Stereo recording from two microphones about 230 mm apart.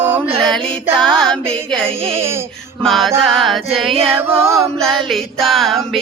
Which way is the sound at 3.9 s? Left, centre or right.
Right.